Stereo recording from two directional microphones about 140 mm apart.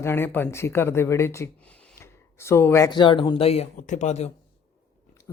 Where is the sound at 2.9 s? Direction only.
35° left (ahead or behind).